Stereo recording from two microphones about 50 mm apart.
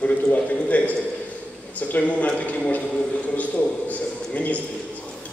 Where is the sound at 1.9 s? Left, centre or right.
Left.